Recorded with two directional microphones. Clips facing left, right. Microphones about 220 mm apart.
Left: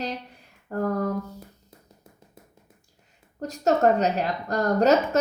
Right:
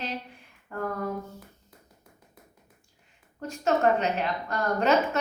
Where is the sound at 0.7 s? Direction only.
40° left (ahead or behind).